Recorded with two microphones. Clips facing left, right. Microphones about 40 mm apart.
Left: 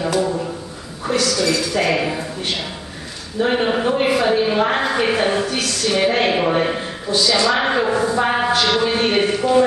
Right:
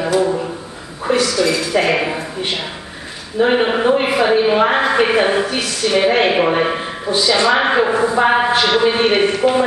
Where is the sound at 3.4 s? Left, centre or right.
Centre.